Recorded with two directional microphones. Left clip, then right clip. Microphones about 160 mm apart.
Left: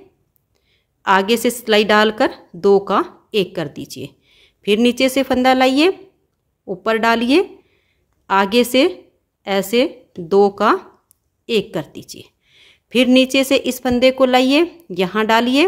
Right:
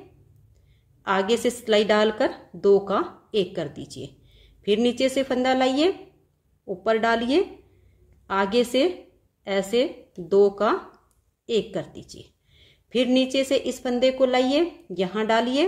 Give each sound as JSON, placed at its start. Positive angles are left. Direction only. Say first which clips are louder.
{"t": 1.0, "sound": "a woman's voice", "louder": "left 7 dB", "side_deg": 45}